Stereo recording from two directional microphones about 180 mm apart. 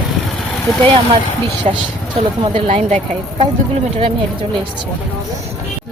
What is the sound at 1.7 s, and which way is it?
Speech, 35° right (ahead or behind).